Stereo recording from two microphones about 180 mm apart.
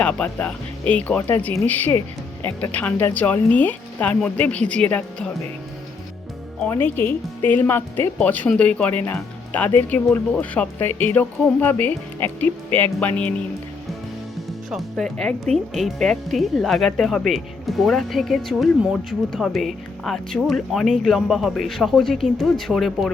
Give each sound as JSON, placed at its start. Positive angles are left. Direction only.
{"t": 0.0, "sound": "speech", "side_deg": 5}
{"t": 6.6, "sound": "speech", "side_deg": 10}
{"t": 14.7, "sound": "speech", "side_deg": 0}